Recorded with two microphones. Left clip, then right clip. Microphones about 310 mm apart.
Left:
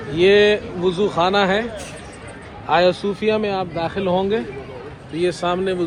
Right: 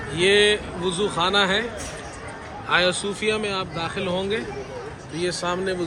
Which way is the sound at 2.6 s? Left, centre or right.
Centre.